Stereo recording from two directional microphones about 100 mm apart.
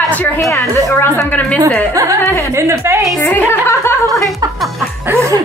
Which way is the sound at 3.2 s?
25° left (ahead or behind).